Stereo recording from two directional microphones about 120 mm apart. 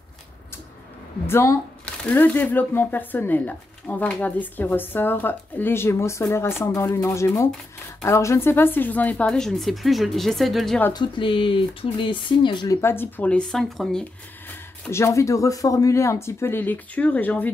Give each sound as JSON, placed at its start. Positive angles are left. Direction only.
{"t": 1.2, "sound": "speech", "side_deg": 20}
{"t": 10.9, "sound": "speech", "side_deg": 40}
{"t": 12.6, "sound": "speech", "side_deg": 20}
{"t": 14.9, "sound": "speech", "side_deg": 20}